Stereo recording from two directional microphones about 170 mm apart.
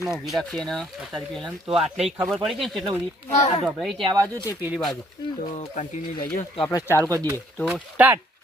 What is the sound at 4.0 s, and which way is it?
Speech, 30° right (ahead or behind).